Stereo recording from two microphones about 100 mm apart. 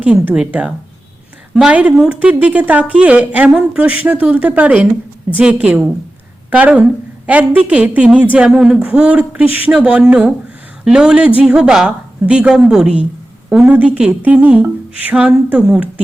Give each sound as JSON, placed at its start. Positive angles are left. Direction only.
{"t": 0.0, "sound": "a woman's voice", "side_deg": -10}